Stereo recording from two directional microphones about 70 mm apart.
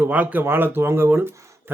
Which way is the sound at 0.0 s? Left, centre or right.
Right.